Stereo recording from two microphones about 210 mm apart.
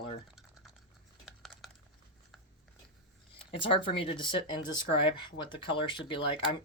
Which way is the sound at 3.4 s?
25° left (ahead or behind).